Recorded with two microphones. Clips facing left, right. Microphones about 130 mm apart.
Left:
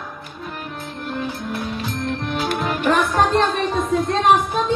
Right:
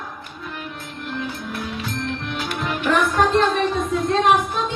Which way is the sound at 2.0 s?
40° left (ahead or behind).